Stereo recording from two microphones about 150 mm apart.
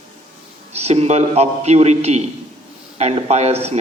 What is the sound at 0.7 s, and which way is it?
A man's voice, 45° right (ahead or behind).